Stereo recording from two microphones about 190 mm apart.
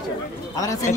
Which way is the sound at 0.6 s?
15° left (ahead or behind).